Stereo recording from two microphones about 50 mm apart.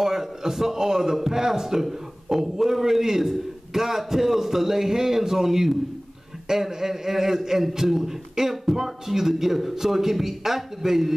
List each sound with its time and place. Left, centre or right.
0.0 s a man's voice: centre